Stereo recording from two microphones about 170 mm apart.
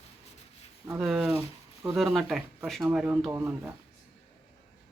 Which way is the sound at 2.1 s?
Centre (ahead or behind).